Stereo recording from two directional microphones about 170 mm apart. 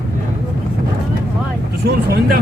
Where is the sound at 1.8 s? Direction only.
65° right (ahead or behind).